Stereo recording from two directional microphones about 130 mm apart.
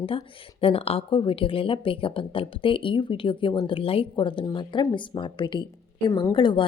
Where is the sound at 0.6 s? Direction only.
50° left (ahead or behind).